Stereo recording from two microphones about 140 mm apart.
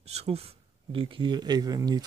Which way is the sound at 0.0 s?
50° right (ahead or behind).